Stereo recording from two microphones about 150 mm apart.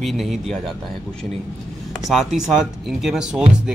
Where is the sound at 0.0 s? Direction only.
Centre (ahead or behind).